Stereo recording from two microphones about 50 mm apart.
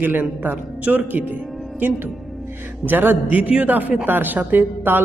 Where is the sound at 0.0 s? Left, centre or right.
Right.